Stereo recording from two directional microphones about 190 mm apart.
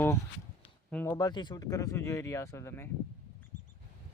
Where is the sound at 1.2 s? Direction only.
20° left (ahead or behind).